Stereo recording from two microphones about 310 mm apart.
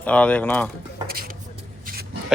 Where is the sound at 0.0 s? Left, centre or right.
Centre.